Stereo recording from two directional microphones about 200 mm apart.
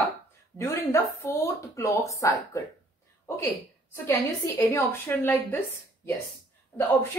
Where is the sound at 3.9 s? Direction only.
15° left (ahead or behind).